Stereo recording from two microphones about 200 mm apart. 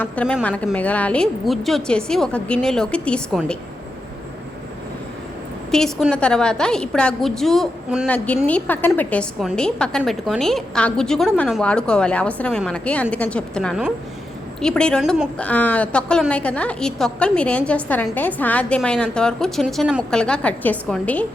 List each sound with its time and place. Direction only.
0.0 s a woman's voice: 5° left (ahead or behind)
5.7 s a woman's voice: 5° left (ahead or behind)